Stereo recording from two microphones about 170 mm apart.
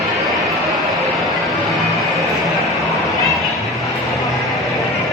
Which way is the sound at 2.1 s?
Centre (ahead or behind).